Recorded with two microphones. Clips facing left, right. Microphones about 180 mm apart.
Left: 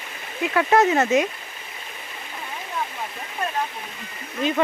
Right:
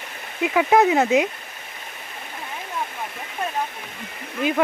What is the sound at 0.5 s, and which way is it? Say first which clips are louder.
Speech: right 1 dB; 10° right (ahead or behind).